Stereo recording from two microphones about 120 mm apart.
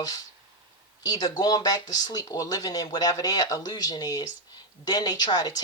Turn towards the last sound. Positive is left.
turn(degrees=30)  # may be behind; listen again after turning